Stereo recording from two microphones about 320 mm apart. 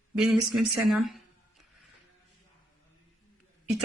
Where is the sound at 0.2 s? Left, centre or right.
Centre.